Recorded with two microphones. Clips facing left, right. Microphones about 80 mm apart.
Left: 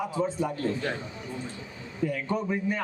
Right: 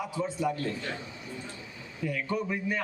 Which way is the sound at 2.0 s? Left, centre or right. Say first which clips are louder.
Left 3 dB; left.